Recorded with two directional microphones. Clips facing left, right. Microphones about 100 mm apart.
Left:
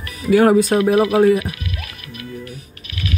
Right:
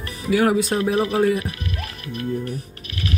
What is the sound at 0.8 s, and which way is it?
Speech, 60° left (ahead or behind).